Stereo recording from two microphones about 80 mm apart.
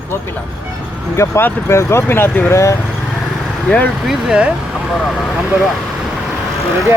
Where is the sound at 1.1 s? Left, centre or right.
Left.